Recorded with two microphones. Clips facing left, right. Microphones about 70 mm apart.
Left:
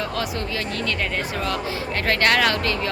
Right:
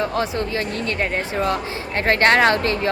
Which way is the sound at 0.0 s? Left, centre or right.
Right.